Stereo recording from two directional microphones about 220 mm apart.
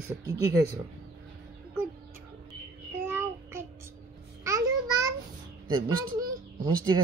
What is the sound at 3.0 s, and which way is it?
Child singing, 10° right (ahead or behind).